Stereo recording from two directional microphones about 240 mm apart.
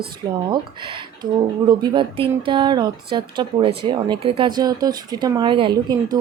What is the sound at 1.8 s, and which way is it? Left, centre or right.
Speech, right.